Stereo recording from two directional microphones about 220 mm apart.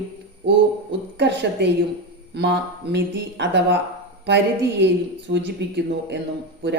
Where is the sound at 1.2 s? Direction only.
50° right (ahead or behind).